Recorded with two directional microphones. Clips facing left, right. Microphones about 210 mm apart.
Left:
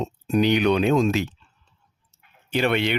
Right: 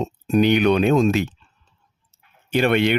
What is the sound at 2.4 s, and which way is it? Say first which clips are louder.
Speech: right 4 dB; 50° right (ahead or behind).